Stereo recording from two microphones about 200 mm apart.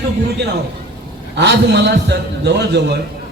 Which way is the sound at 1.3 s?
55° right (ahead or behind).